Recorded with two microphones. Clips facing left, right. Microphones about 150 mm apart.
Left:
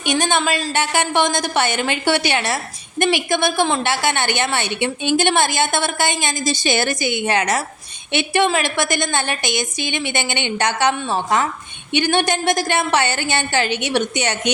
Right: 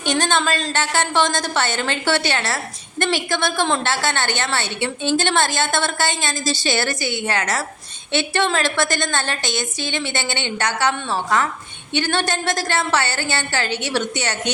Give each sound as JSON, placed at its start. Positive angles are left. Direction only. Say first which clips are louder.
{"t": 0.0, "sound": "a woman's voice", "louder": "left 1 dB", "side_deg": 10}